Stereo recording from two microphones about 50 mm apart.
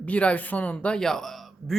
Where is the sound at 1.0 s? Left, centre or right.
Centre.